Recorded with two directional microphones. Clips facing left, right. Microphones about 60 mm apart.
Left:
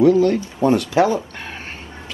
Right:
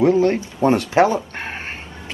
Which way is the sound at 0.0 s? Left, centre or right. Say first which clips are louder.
Left 2 dB; right.